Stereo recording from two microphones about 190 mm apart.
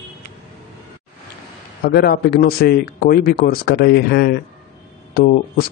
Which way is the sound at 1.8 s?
55° left (ahead or behind).